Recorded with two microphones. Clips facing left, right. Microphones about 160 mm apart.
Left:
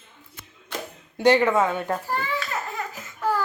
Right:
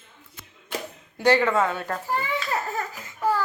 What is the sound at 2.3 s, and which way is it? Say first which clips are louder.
Baby cry: right 2 dB; 35° right (ahead or behind).